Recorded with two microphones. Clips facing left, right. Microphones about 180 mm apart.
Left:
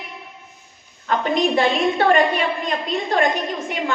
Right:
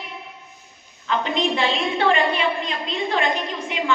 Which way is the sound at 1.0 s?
50° left (ahead or behind).